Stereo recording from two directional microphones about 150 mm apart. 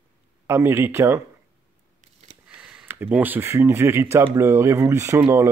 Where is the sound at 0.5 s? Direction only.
15° right (ahead or behind).